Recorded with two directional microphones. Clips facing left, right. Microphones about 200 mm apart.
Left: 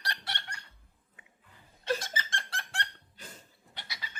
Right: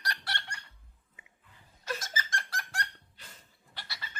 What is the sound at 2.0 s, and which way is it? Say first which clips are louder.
Squeak: right 1 dB; 25° left (ahead or behind).